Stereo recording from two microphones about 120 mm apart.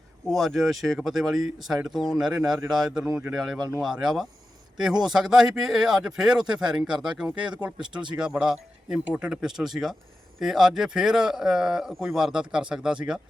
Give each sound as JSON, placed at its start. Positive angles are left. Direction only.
{"t": 0.3, "sound": "speech", "side_deg": 0}